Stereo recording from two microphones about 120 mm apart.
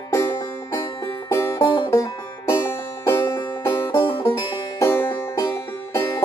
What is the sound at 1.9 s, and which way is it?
Music, 25° left (ahead or behind).